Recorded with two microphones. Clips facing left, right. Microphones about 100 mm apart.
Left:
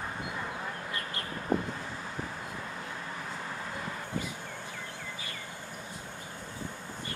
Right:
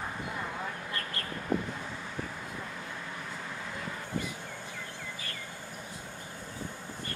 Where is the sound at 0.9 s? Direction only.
20° left (ahead or behind).